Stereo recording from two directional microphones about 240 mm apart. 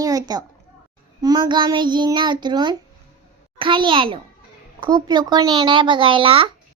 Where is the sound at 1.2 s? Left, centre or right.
Centre.